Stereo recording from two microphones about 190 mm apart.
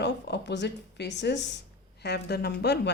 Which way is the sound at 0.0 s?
65° left (ahead or behind).